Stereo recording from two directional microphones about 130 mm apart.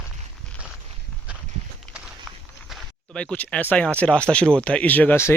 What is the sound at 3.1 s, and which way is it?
Speech, 10° left (ahead or behind).